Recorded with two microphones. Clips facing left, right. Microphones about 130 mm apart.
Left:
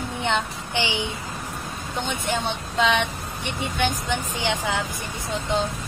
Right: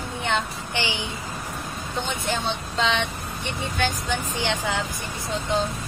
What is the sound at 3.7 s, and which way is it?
Speech, 15° left (ahead or behind).